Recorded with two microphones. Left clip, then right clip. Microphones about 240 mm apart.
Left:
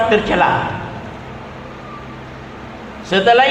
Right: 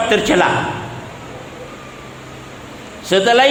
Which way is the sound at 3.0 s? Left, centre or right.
Right.